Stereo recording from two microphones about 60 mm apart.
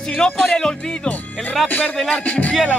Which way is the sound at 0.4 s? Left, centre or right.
Centre.